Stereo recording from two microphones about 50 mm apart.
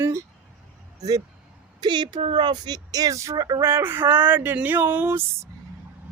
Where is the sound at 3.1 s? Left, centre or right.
Right.